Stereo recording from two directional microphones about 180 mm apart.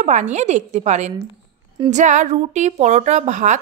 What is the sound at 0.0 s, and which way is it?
A woman's voice, 40° right (ahead or behind).